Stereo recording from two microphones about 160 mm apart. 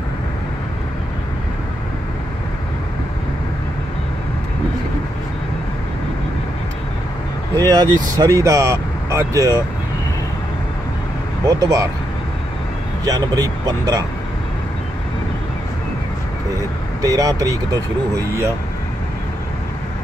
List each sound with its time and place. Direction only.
7.5 s speech: 25° right (ahead or behind)
11.4 s speech: 20° right (ahead or behind)
13.0 s speech: 20° right (ahead or behind)
17.0 s speech: 20° right (ahead or behind)